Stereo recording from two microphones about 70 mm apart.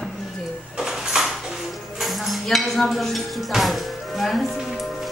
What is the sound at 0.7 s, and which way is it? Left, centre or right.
Music, centre.